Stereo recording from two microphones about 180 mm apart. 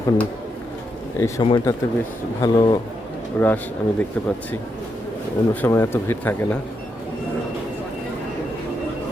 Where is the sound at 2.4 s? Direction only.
25° left (ahead or behind).